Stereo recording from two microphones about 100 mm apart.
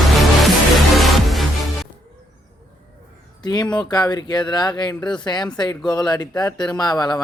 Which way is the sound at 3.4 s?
45° left (ahead or behind).